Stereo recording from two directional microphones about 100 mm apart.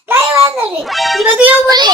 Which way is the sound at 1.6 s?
45° right (ahead or behind).